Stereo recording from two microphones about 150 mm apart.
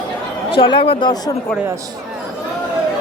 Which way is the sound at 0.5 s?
35° left (ahead or behind).